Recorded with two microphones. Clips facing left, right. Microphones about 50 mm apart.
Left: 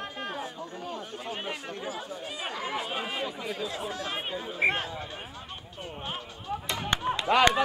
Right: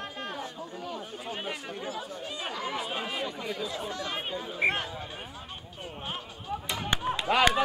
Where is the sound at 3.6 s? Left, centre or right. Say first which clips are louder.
Left 1 dB; centre.